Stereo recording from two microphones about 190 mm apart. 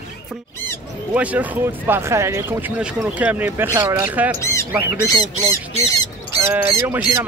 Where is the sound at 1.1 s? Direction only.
5° right (ahead or behind).